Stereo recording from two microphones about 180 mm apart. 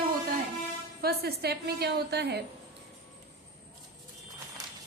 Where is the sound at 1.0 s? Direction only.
60° right (ahead or behind).